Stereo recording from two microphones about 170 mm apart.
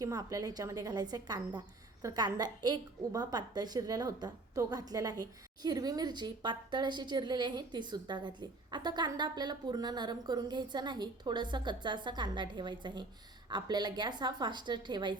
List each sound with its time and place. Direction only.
0.0 s a woman's voice: 20° right (ahead or behind)